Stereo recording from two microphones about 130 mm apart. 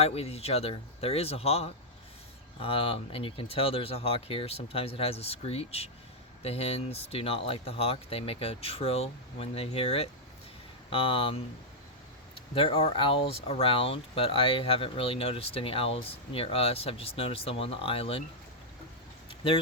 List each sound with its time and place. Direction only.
0.0 s speech: 50° left (ahead or behind)
12.5 s speech: 50° left (ahead or behind)